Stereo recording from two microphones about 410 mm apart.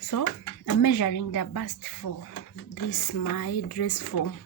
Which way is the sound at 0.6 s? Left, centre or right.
Left.